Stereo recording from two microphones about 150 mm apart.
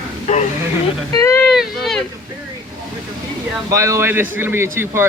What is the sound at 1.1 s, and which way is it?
Speech, 20° left (ahead or behind).